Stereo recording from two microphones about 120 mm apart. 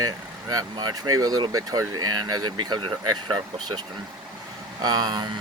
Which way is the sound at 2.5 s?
40° right (ahead or behind).